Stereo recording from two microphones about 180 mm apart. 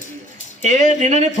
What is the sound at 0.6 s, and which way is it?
Speech, 45° right (ahead or behind).